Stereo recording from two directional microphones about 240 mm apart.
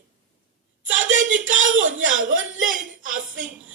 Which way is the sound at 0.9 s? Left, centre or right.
Right.